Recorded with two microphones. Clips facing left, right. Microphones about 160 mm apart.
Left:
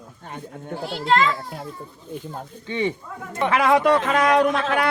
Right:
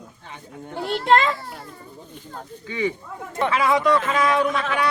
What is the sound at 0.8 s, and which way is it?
Speech, 60° right (ahead or behind).